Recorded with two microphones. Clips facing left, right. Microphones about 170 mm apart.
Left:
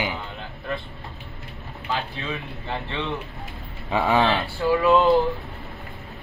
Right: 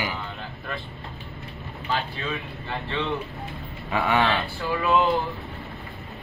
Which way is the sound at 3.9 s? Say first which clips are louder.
Left 2 dB; 30° left (ahead or behind).